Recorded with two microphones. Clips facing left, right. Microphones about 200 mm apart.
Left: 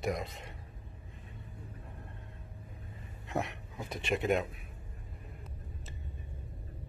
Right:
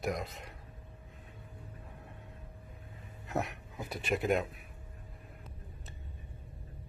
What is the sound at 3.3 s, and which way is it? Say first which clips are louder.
Speech: even; centre (ahead or behind).